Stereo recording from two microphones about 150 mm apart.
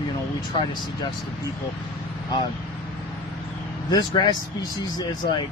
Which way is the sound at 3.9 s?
30° left (ahead or behind).